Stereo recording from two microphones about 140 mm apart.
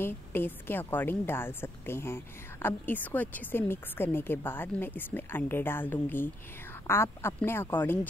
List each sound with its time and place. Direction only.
0.0 s a woman's voice: 15° left (ahead or behind)